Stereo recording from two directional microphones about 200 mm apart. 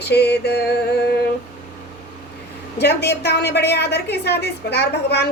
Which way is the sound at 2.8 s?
55° left (ahead or behind).